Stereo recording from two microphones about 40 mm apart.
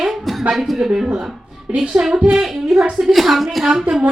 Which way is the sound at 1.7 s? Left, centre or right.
Right.